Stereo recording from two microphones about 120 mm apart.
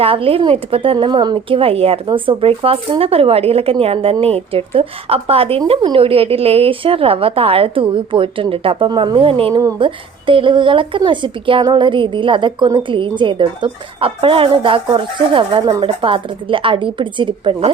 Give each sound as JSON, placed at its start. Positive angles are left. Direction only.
{"t": 0.0, "sound": "a woman's voice", "side_deg": -50}